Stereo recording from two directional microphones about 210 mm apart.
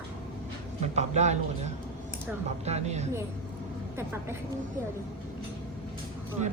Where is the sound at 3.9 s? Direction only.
10° right (ahead or behind).